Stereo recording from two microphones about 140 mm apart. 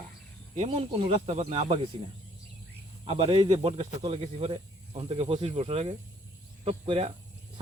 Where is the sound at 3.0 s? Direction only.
40° right (ahead or behind).